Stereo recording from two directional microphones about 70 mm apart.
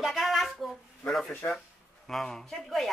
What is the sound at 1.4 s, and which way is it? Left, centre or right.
Speech, left.